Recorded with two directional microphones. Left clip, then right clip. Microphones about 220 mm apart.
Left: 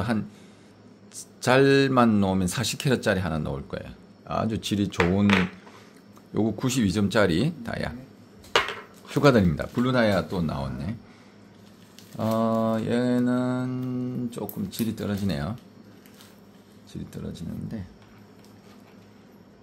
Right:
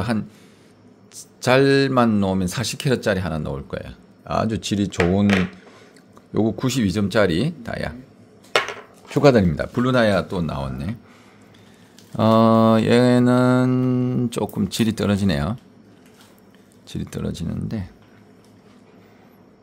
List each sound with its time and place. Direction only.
0.0 s speech: 15° right (ahead or behind)
6.3 s speech: 15° right (ahead or behind)
9.1 s speech: 15° right (ahead or behind)
12.2 s mantra: 40° right (ahead or behind)
16.9 s mantra: 40° right (ahead or behind)